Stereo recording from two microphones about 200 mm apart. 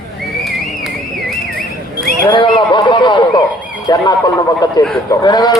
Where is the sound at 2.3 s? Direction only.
25° left (ahead or behind).